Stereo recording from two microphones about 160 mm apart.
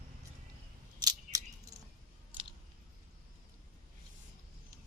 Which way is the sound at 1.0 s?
25° right (ahead or behind).